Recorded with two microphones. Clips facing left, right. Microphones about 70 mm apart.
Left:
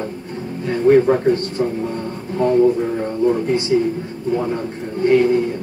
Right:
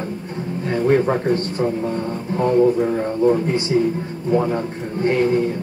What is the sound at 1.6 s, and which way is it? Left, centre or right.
Speech, centre.